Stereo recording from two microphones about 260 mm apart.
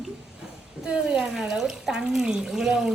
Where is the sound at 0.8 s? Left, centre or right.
Centre.